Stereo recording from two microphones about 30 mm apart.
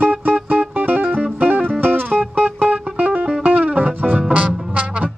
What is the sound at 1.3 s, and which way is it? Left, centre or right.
Music, right.